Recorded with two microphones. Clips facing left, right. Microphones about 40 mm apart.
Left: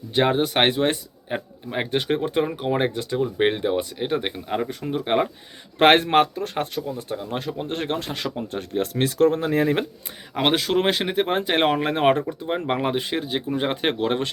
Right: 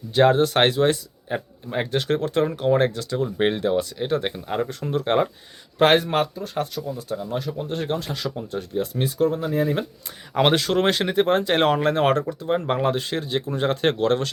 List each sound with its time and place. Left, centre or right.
0.1 s speech: centre
5.8 s speech: left
10.3 s speech: centre